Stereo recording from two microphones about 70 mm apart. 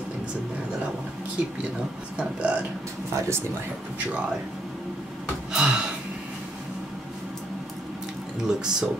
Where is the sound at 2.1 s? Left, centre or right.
Centre.